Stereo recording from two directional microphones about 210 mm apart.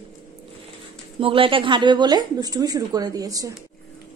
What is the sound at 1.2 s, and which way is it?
A woman's voice, 25° right (ahead or behind).